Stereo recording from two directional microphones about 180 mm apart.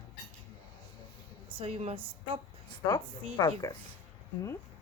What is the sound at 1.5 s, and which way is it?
Speech, 35° right (ahead or behind).